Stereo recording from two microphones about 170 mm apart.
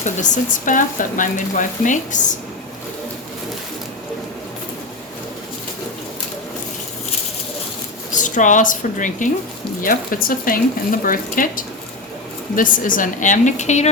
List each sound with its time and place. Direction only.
0.0 s speech: 50° left (ahead or behind)
8.2 s speech: 50° left (ahead or behind)